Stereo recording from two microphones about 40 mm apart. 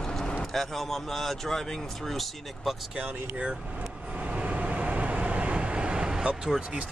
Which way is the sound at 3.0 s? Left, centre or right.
Right.